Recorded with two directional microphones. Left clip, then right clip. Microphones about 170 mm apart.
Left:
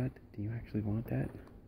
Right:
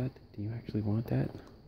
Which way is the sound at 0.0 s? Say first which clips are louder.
Right 1 dB; 5° right (ahead or behind).